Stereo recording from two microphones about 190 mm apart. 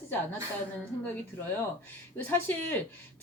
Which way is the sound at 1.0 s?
10° left (ahead or behind).